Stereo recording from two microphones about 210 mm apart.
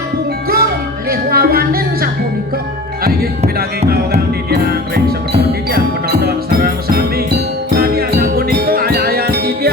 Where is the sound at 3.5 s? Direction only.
45° right (ahead or behind).